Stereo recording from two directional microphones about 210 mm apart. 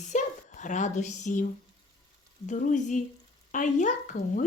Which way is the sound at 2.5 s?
35° left (ahead or behind).